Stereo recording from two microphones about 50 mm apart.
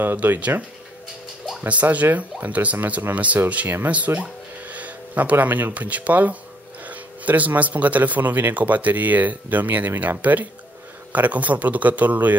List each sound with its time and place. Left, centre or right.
0.0 s speech: right
1.7 s speech: right